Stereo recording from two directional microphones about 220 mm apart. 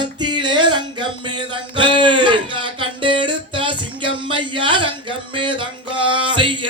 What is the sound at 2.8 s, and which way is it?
Music, 20° right (ahead or behind).